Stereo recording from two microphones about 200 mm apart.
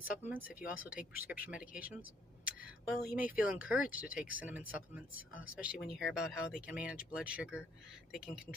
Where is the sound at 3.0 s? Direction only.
45° left (ahead or behind).